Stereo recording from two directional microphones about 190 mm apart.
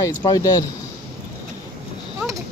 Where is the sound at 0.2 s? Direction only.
20° left (ahead or behind).